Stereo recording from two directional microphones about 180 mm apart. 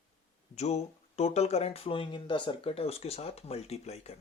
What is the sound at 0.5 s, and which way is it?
Speech, 35° left (ahead or behind).